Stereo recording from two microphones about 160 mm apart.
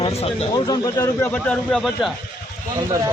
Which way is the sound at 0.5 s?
25° left (ahead or behind).